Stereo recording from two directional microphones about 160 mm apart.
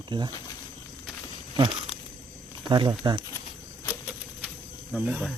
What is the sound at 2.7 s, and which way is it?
Speech, 30° right (ahead or behind).